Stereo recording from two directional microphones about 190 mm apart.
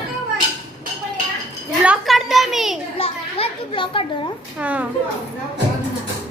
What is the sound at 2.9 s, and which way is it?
Children playing, 30° left (ahead or behind).